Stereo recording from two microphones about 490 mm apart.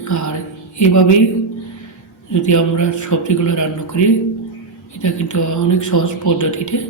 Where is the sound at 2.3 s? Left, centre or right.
Left.